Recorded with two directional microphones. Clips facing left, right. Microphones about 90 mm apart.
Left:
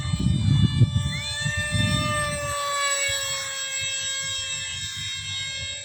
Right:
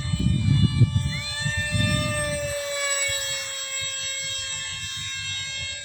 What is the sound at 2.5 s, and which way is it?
Siren, 75° left (ahead or behind).